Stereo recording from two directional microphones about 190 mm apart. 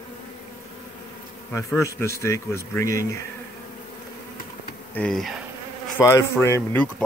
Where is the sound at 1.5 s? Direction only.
15° left (ahead or behind).